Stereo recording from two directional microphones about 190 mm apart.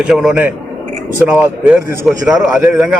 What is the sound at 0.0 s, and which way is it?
A man's voice, 5° right (ahead or behind).